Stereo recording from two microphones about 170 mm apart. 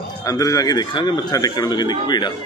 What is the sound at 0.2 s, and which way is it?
A man's voice, 20° left (ahead or behind).